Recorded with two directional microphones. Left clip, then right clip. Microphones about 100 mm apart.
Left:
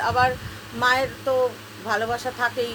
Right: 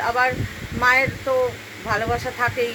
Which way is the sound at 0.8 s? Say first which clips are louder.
Right 3 dB; 10° left (ahead or behind).